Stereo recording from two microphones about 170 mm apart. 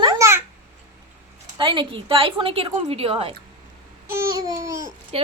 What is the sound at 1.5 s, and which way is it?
Speech, 30° right (ahead or behind).